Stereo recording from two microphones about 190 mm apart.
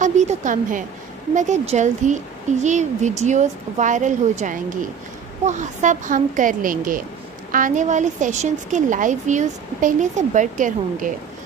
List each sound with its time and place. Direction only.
0.0 s a woman's voice: 40° right (ahead or behind)